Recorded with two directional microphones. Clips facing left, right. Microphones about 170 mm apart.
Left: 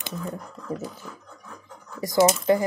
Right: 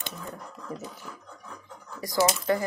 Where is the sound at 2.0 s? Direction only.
25° left (ahead or behind).